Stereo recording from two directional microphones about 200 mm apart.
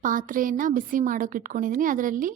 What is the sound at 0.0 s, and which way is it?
A woman's voice, 40° right (ahead or behind).